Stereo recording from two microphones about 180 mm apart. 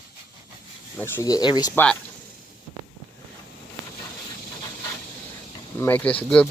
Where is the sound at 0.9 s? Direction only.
10° left (ahead or behind).